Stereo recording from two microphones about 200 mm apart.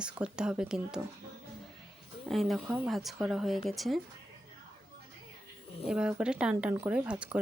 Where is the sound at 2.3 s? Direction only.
Centre (ahead or behind).